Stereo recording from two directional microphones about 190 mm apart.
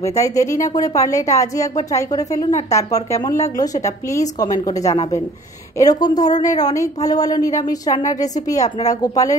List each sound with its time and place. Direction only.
0.2 s a woman's voice: 15° left (ahead or behind)